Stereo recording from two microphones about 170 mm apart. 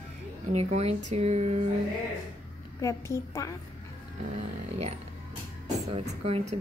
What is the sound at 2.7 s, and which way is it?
Speech, 15° left (ahead or behind).